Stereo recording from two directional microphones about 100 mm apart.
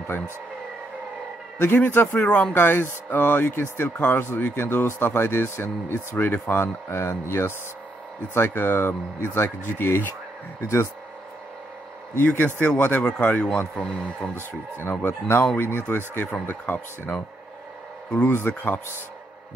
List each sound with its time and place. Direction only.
1.6 s speech: 20° left (ahead or behind)
2.2 s speech: 10° left (ahead or behind)
2.5 s speech: 20° left (ahead or behind)
12.2 s speech: 20° left (ahead or behind)
14.8 s speech: 20° left (ahead or behind)
18.3 s speech: 20° left (ahead or behind)